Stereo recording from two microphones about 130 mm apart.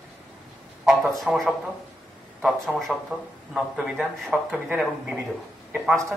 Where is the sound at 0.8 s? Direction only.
5° right (ahead or behind).